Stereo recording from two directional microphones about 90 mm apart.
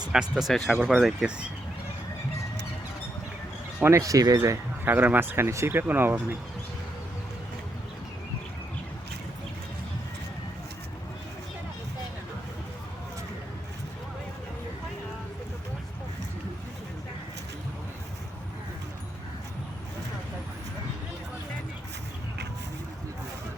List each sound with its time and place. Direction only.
0.1 s speech: 5° right (ahead or behind)
3.8 s speech: 35° right (ahead or behind)
4.9 s speech: 20° right (ahead or behind)